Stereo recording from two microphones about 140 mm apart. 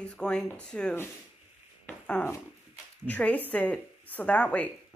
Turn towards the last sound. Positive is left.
turn(degrees=10)  # may be behind; listen again after turning